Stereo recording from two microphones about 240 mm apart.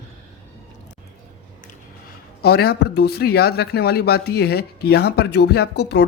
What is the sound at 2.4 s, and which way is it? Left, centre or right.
Speech, left.